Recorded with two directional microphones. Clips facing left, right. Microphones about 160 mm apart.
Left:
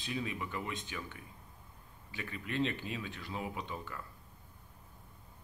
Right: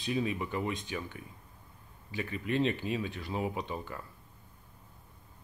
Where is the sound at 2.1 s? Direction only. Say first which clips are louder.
Right 5 dB; 20° right (ahead or behind).